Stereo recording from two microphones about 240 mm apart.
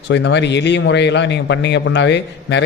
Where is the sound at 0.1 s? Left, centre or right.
Left.